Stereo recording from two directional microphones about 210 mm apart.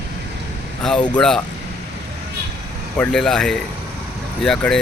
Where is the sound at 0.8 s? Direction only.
5° left (ahead or behind).